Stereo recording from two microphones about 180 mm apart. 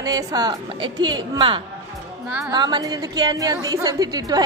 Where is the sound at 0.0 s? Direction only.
20° right (ahead or behind).